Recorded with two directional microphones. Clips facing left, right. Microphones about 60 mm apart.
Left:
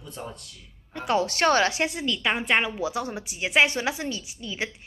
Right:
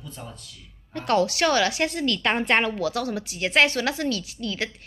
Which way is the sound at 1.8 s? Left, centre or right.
Centre.